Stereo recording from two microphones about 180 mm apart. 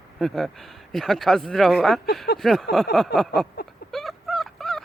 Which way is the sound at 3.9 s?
Centre (ahead or behind).